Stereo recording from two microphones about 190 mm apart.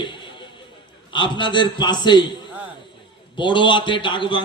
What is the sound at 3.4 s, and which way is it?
A man's voice, 25° left (ahead or behind).